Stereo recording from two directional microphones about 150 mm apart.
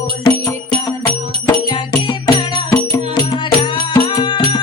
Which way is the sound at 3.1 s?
30° left (ahead or behind).